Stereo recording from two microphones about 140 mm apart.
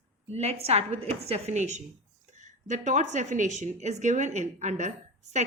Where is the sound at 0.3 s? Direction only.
50° right (ahead or behind).